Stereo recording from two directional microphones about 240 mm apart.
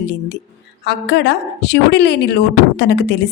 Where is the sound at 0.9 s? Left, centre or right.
Left.